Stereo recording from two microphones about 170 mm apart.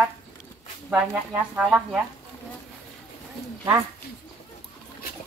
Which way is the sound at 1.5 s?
Centre (ahead or behind).